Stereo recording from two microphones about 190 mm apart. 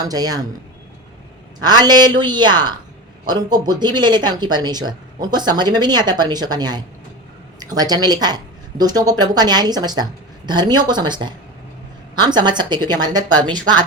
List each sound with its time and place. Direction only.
0.0 s speech: 20° right (ahead or behind)
1.6 s speech: 20° right (ahead or behind)